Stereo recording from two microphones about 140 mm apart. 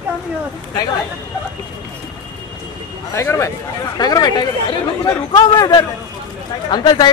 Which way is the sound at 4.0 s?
30° left (ahead or behind).